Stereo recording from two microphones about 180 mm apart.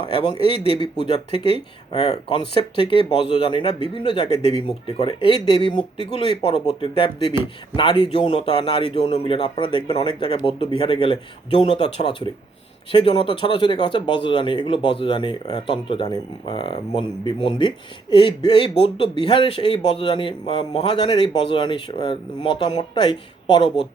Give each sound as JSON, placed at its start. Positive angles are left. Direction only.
{"t": 0.1, "sound": "speech", "side_deg": 30}
{"t": 1.9, "sound": "speech", "side_deg": 30}